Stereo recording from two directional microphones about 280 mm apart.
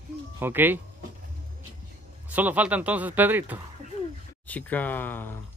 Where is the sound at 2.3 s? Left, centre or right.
Centre.